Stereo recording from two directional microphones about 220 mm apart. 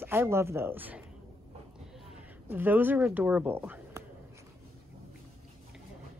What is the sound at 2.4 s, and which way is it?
Speech, 10° right (ahead or behind).